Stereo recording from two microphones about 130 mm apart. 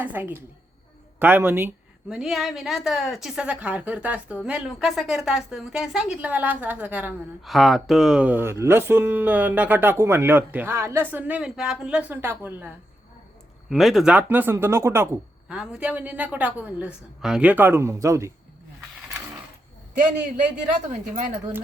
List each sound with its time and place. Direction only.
0.0 s speech: 15° right (ahead or behind)
2.0 s a woman's voice: 5° right (ahead or behind)
7.4 s speech: centre (ahead or behind)
13.7 s speech: centre (ahead or behind); by 15.2 s 20° right (ahead or behind)
15.4 s speech: 5° right (ahead or behind); by 18.3 s 25° right (ahead or behind)
19.9 s a man's voice: 80° right